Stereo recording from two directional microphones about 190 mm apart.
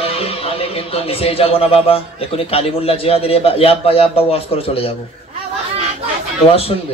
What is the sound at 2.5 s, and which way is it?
A man's voice, 30° left (ahead or behind).